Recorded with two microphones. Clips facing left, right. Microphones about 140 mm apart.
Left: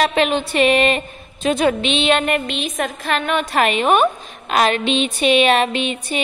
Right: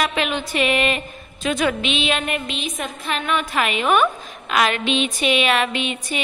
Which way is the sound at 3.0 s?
50° left (ahead or behind).